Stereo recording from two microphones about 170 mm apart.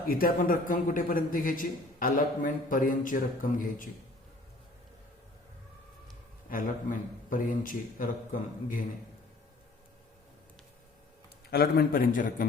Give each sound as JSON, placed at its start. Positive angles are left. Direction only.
{"t": 0.1, "sound": "a man's voice", "side_deg": 55}
{"t": 7.3, "sound": "a man's voice", "side_deg": 55}
{"t": 11.5, "sound": "a man's voice", "side_deg": 65}